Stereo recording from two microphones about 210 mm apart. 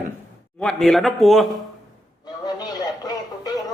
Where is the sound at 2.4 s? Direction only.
20° left (ahead or behind).